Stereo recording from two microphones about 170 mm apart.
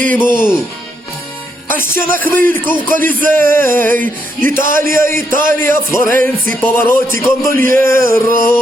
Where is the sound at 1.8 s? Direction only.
15° left (ahead or behind).